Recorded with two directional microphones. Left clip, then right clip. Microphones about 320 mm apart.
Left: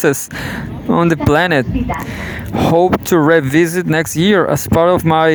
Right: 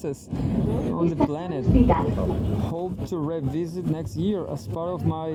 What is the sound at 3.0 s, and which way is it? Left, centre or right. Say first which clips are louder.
Speech: left 18 dB; left.